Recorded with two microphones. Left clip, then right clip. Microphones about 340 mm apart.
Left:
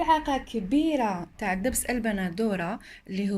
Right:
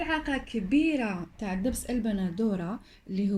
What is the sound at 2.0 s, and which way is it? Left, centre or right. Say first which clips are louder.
Speech: left 4 dB; left.